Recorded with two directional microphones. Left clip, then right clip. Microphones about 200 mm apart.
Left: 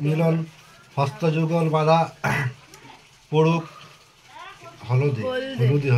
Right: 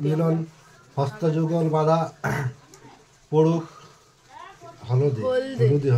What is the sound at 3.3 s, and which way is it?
Speech, 25° right (ahead or behind).